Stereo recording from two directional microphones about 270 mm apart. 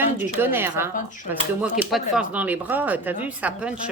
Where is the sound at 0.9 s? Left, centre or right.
Left.